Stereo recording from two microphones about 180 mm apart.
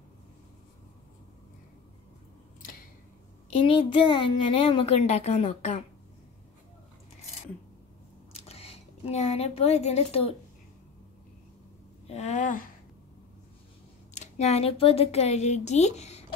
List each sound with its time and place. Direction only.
3.5 s a child's voice: 30° left (ahead or behind)
8.3 s speech: 35° left (ahead or behind)
12.1 s a sound: 40° left (ahead or behind)
14.1 s a child's voice: 40° left (ahead or behind)